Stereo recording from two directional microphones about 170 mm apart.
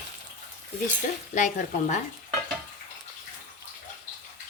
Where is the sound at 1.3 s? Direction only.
50° left (ahead or behind).